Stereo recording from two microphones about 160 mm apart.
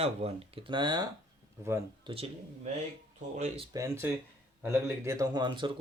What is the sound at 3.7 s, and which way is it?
Speech, 20° right (ahead or behind).